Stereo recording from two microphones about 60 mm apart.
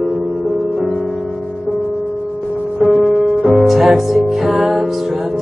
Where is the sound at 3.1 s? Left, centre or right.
Right.